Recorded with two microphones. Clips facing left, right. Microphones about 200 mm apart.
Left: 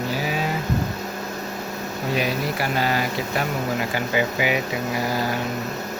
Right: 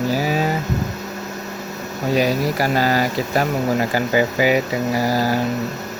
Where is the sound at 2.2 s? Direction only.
40° right (ahead or behind).